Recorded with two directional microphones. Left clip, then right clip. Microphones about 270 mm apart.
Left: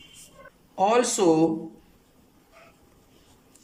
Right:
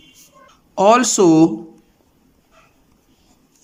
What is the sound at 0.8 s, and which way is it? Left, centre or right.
Speech, right.